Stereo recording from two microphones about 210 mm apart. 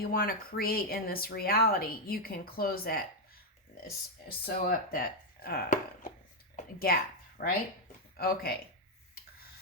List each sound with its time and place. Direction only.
0.0 s speech: 45° left (ahead or behind)
4.4 s speech: 45° left (ahead or behind)